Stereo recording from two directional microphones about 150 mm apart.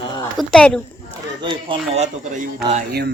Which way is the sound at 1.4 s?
35° right (ahead or behind).